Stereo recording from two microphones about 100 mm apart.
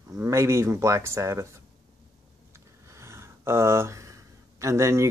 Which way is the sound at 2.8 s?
30° right (ahead or behind).